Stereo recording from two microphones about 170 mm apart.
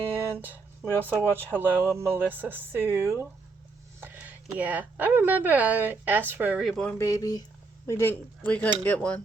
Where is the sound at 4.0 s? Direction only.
10° right (ahead or behind).